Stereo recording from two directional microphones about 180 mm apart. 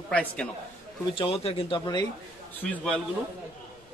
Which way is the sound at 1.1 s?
30° left (ahead or behind).